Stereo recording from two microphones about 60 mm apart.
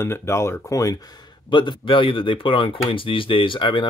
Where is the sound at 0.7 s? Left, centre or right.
Left.